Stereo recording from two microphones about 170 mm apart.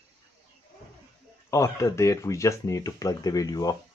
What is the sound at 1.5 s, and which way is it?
Speech, 15° left (ahead or behind).